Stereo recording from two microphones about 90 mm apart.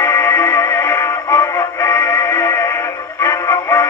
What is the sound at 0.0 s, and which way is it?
Music, 30° left (ahead or behind).